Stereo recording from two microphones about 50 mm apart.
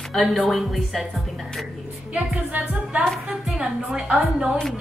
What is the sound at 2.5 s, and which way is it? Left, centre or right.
Music, right.